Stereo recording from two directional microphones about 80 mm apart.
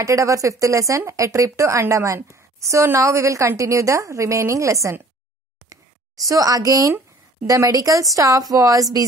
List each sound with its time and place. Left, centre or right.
0.0 s speech: right
5.7 s a sound: right
7.4 s speech: right